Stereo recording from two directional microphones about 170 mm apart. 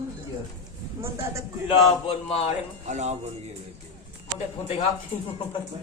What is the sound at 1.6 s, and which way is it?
Speech, 35° left (ahead or behind).